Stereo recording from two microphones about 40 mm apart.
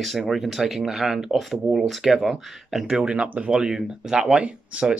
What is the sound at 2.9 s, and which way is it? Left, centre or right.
Speech, right.